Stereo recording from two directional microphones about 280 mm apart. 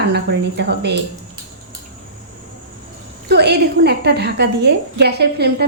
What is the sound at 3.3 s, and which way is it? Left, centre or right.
A woman's voice, right.